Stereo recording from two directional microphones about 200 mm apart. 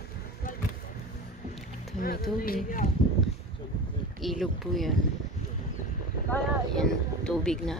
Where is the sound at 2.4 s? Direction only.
45° left (ahead or behind).